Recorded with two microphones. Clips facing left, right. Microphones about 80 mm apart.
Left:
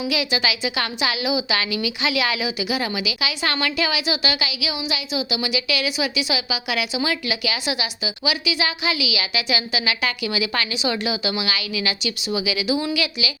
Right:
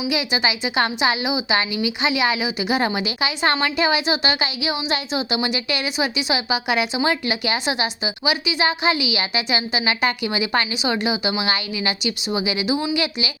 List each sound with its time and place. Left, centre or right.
0.1 s a woman's voice: right